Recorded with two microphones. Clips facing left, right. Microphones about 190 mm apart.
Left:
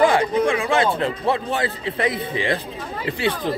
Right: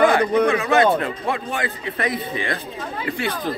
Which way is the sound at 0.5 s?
30° left (ahead or behind).